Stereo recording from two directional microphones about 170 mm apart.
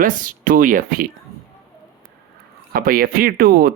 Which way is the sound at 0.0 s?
50° right (ahead or behind).